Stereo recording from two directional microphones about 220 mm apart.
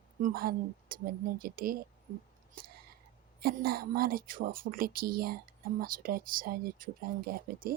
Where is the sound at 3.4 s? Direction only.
45° right (ahead or behind).